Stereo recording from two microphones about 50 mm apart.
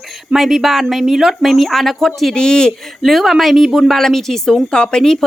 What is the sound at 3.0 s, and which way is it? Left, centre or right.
A woman's voice, centre.